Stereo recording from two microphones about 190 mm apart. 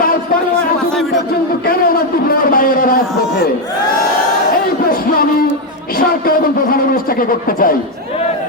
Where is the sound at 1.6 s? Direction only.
50° left (ahead or behind).